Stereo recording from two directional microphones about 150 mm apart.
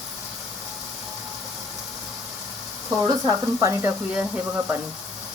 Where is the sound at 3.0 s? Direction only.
25° right (ahead or behind).